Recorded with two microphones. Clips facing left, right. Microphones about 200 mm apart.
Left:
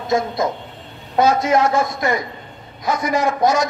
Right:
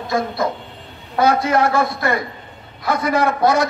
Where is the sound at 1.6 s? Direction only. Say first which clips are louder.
Even; 60° right (ahead or behind).